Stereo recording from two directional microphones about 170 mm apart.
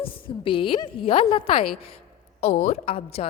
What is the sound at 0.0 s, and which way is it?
A woman's voice, 30° left (ahead or behind).